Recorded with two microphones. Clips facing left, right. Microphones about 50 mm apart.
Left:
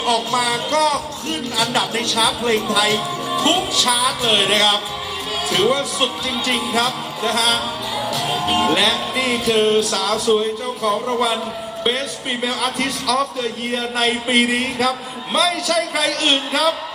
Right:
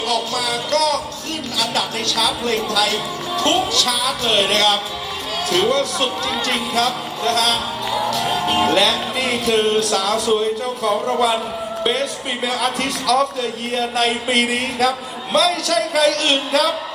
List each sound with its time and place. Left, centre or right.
0.0 s music: left
1.7 s a man's voice: centre